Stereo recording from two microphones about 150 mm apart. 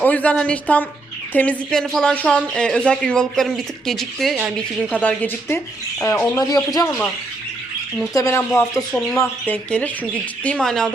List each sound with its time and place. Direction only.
0.0 s a woman's voice: 10° left (ahead or behind)
6.0 s speech: 20° left (ahead or behind)
8.1 s speech: 20° left (ahead or behind); by 10.9 s 5° left (ahead or behind)